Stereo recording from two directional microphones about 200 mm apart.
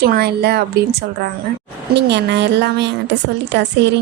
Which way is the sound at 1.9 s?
60° right (ahead or behind).